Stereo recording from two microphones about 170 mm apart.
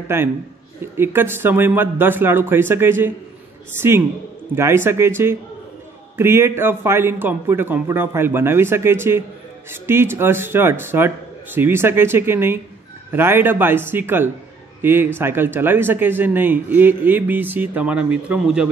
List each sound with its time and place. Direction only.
0.1 s speech: 15° right (ahead or behind)